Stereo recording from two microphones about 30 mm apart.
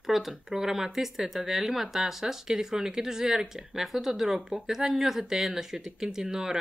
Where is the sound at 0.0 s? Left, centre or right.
Centre.